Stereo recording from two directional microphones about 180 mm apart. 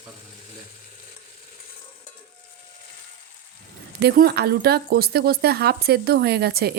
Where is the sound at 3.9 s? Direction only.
60° right (ahead or behind).